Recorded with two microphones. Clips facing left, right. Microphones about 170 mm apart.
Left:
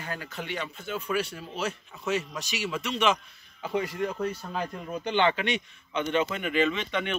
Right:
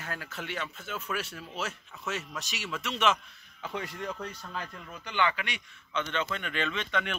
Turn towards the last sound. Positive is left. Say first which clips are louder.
# left 3 dB
turn(degrees=0)  # may be behind; listen again after turning